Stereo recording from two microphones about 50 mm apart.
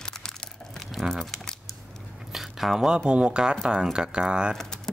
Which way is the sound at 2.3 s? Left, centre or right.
Centre.